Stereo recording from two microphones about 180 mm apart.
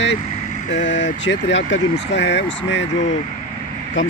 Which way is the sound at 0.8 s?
85° left.